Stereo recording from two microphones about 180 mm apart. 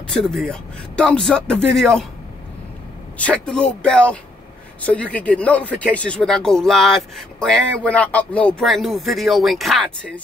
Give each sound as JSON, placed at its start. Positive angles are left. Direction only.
{"t": 0.1, "sound": "speech", "side_deg": 0}
{"t": 3.3, "sound": "speech", "side_deg": 5}